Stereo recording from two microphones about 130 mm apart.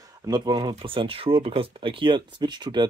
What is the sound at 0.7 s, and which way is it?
Speech, 45° right (ahead or behind).